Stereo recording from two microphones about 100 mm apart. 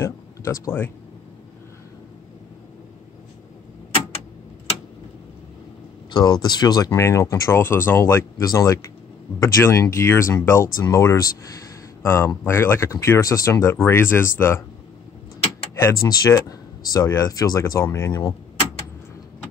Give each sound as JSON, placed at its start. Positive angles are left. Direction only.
{"t": 0.0, "sound": "speech", "side_deg": 25}
{"t": 6.1, "sound": "speech", "side_deg": 45}
{"t": 6.9, "sound": "speech", "side_deg": 30}
{"t": 15.7, "sound": "speech", "side_deg": 30}